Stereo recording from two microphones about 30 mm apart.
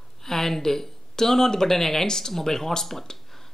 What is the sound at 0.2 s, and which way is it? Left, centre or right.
Speech, centre.